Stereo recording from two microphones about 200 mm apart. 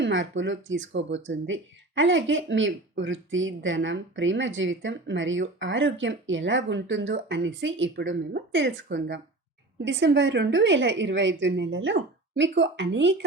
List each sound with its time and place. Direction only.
0.0 s a woman's voice: 70° right (ahead or behind)